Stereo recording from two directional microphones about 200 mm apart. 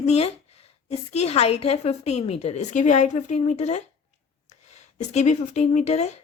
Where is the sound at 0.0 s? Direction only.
30° left (ahead or behind).